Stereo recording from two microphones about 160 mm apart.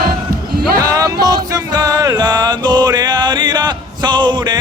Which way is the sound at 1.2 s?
25° right (ahead or behind).